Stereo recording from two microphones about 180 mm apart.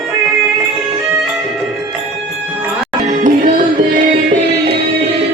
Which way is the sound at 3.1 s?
45° right (ahead or behind).